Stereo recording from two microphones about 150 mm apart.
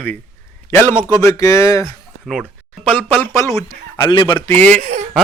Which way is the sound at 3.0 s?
15° left (ahead or behind).